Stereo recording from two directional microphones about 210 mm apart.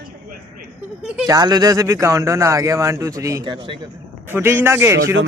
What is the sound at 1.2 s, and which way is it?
Speech, 15° right (ahead or behind).